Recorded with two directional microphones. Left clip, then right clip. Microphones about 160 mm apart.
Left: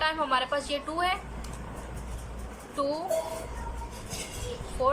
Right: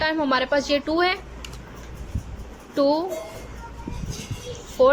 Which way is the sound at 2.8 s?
40° right (ahead or behind).